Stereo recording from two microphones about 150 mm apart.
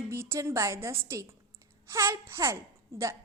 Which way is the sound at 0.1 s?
20° right (ahead or behind).